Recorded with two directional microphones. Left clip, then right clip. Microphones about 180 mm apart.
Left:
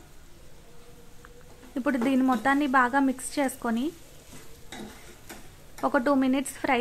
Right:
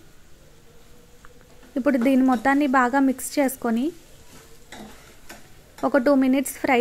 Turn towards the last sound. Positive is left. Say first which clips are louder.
# right 5 dB
turn(degrees=-15)  # may be behind; listen again after turning